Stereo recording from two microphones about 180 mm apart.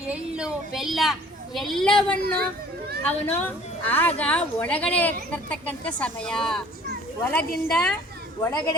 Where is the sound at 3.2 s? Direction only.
10° left (ahead or behind).